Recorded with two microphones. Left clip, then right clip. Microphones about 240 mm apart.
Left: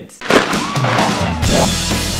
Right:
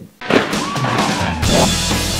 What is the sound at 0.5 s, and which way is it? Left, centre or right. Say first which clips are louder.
Music: left 2 dB; centre.